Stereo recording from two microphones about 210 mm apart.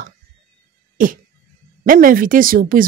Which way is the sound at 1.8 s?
40° right (ahead or behind).